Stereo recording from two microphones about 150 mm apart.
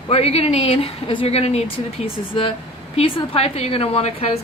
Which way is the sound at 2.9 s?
35° left (ahead or behind).